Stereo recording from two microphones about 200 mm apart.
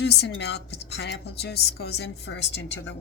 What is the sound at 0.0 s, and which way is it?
Speech, 55° left (ahead or behind).